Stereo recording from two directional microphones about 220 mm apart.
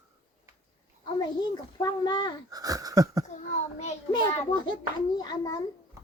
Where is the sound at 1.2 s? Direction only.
20° left (ahead or behind).